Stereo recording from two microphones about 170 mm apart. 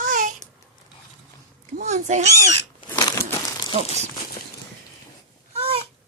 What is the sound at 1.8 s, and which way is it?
Cat, 45° right (ahead or behind).